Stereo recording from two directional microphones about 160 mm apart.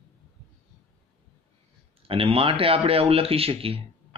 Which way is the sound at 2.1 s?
35° right (ahead or behind).